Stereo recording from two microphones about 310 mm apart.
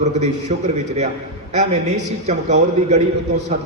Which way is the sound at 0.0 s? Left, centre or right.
Right.